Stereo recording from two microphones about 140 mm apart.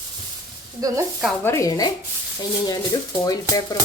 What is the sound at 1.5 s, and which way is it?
Stir, 25° left (ahead or behind).